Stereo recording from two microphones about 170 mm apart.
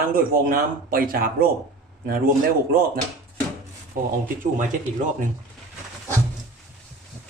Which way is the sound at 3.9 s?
55° right (ahead or behind).